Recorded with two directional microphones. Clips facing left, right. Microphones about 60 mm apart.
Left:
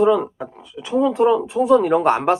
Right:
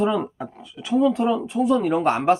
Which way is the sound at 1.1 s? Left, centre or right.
Centre.